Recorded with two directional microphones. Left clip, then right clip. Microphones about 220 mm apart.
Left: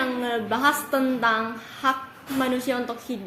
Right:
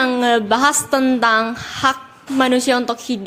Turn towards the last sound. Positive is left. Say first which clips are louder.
# right 9 dB
turn(degrees=-45)  # may be behind; listen again after turning